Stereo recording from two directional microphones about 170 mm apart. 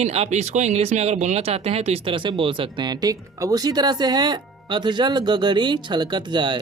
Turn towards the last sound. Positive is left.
turn(degrees=-25)  # may be behind; listen again after turning